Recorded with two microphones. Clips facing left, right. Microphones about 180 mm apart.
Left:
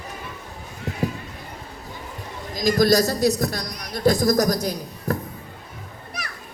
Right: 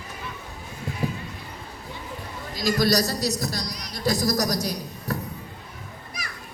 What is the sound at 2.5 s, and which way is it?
A man's voice, 45° left (ahead or behind).